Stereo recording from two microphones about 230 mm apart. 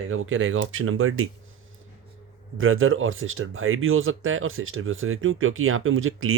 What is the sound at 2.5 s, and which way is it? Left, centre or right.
Speech, right.